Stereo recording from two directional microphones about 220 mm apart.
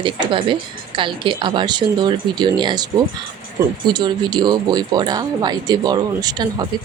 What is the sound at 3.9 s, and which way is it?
Speech, 20° right (ahead or behind).